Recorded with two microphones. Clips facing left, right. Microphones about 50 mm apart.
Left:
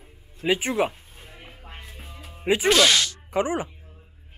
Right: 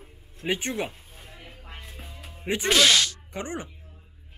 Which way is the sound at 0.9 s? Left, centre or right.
Centre.